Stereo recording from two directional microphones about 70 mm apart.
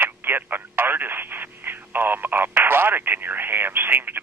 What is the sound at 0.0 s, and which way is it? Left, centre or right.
Speech, right.